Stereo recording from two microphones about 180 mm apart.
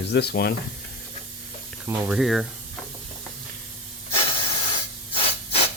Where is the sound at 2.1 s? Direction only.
Centre (ahead or behind).